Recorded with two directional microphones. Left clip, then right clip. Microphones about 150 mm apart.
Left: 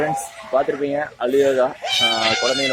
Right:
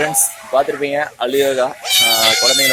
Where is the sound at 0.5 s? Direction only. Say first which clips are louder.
Right 3 dB; 15° right (ahead or behind).